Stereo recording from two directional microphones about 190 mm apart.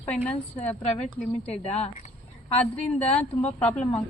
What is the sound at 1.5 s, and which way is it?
Speech, 35° left (ahead or behind).